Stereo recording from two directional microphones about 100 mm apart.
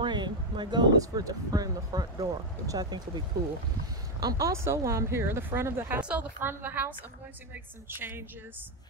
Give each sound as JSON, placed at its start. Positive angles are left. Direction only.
{"t": 0.0, "sound": "speech", "side_deg": -50}